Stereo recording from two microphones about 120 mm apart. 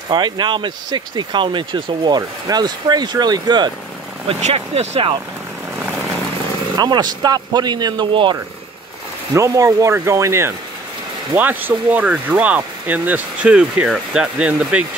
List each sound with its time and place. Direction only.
0.1 s speech: 40° right (ahead or behind)
4.4 s speech: 65° right (ahead or behind)
6.8 s speech: 35° right (ahead or behind)
9.3 s speech: 25° right (ahead or behind); by 14.9 s 10° right (ahead or behind)